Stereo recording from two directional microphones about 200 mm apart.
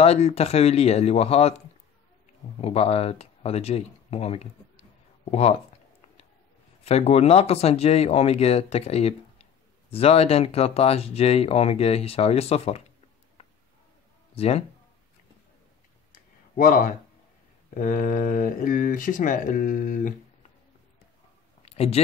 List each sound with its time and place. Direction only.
0.0 s speech: 30° left (ahead or behind)
2.6 s speech: 30° left (ahead or behind)
6.8 s speech: 30° left (ahead or behind)
14.3 s speech: 30° left (ahead or behind)
16.1 s a sound: 45° left (ahead or behind)
17.7 s speech: 40° left (ahead or behind)
21.6 s a sound: 30° left (ahead or behind)